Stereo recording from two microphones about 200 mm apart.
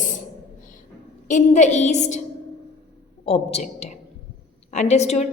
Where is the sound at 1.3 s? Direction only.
35° left (ahead or behind).